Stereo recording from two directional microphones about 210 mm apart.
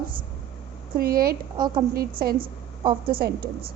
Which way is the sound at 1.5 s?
20° right (ahead or behind).